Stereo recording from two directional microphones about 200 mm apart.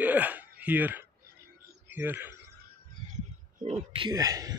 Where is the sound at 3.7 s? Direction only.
25° right (ahead or behind).